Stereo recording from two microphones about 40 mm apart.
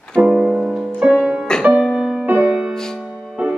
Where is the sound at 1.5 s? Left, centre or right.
Centre.